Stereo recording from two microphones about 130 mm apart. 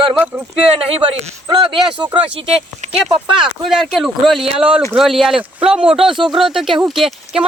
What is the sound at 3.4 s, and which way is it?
Speech, centre (ahead or behind).